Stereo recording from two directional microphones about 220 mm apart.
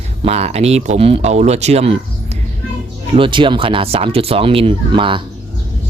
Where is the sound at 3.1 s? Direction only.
25° right (ahead or behind).